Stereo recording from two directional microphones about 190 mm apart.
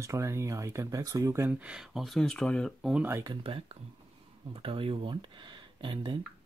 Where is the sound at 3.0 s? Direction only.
15° right (ahead or behind).